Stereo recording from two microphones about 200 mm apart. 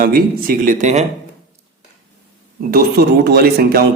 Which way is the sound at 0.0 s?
45° right (ahead or behind).